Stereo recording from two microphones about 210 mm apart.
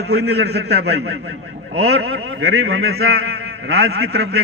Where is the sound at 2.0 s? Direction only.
85° right.